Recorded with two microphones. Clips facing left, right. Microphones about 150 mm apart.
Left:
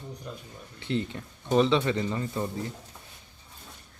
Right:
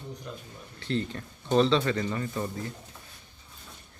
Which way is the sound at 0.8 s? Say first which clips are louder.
Even; 15° left (ahead or behind).